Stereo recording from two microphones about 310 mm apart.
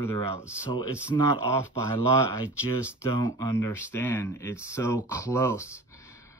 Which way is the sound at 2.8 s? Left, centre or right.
Centre.